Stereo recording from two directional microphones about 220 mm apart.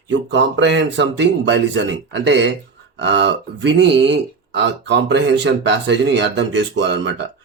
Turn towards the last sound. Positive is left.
turn(degrees=-55)  # may be behind; listen again after turning